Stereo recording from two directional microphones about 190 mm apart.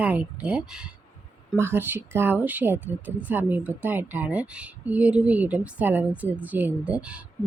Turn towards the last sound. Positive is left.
turn(degrees=-5)  # may be behind; listen again after turning